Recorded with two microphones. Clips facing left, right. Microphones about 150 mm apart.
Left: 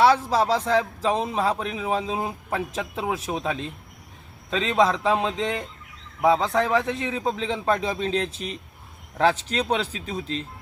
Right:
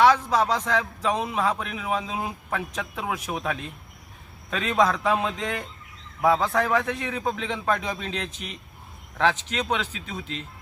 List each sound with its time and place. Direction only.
0.0 s a man's voice: 30° left (ahead or behind)